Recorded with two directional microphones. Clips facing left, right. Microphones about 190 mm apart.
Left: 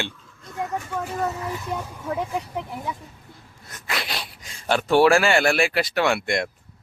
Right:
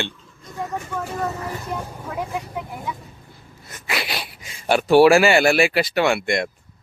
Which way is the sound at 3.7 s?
5° right (ahead or behind).